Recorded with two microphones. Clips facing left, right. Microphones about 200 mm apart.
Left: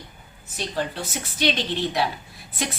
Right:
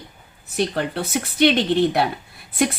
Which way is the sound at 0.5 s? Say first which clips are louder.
Right 6 dB; 60° right (ahead or behind).